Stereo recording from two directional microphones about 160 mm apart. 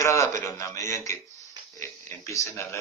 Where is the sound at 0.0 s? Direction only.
20° left (ahead or behind).